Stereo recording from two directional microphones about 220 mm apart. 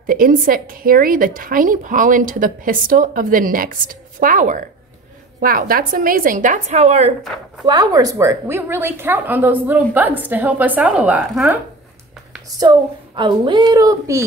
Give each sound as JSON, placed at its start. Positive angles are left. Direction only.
{"t": 0.0, "sound": "a woman's voice", "side_deg": -40}
{"t": 12.5, "sound": "a woman's voice", "side_deg": -20}